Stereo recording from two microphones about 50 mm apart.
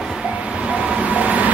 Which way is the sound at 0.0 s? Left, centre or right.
Centre.